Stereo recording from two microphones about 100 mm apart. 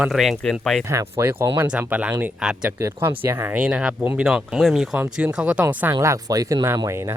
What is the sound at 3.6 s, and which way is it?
Speech, 10° right (ahead or behind).